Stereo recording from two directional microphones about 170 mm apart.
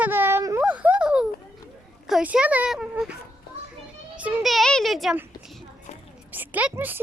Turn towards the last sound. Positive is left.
turn(degrees=-10)  # may be behind; listen again after turning